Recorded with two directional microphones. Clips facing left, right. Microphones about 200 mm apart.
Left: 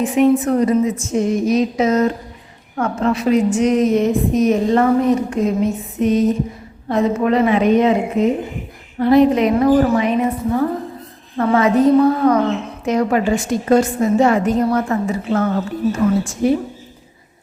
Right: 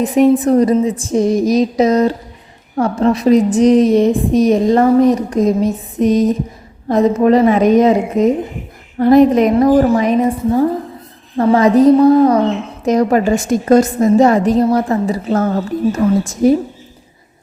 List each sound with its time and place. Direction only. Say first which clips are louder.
0.0 s a woman's voice: right 3 dB; 35° right (ahead or behind)